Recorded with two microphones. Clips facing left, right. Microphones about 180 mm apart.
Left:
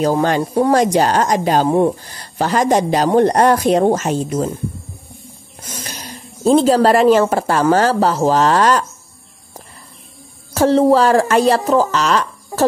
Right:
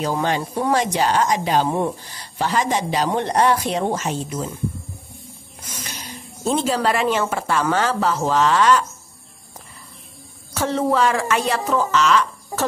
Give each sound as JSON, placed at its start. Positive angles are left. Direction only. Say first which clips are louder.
{"t": 0.0, "sound": "speech", "louder": "left 6 dB", "side_deg": 45}
{"t": 1.7, "sound": "speech", "louder": "left 8 dB", "side_deg": 35}
{"t": 5.7, "sound": "a woman's voice", "louder": "left 4 dB", "side_deg": 40}
{"t": 10.5, "sound": "speech", "louder": "left 9 dB", "side_deg": 35}